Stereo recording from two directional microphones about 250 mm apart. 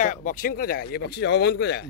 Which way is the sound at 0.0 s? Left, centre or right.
Left.